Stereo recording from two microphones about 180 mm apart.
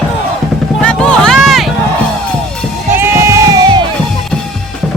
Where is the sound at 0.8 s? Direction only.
5° left (ahead or behind).